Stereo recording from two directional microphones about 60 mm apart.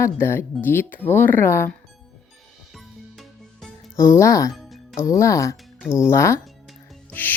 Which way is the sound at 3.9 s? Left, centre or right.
Left.